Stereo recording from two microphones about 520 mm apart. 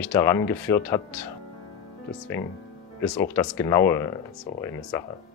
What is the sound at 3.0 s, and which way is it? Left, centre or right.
Speech, centre.